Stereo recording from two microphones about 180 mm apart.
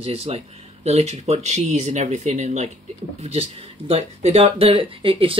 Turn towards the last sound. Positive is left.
turn(degrees=-30)  # may be behind; listen again after turning